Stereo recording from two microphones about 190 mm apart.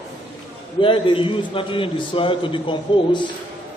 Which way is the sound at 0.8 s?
25° left (ahead or behind).